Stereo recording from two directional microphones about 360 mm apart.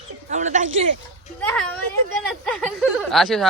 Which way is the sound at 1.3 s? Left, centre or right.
Centre.